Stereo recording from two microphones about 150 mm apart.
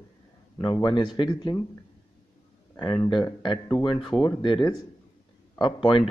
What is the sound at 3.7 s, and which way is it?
Speech, 30° left (ahead or behind).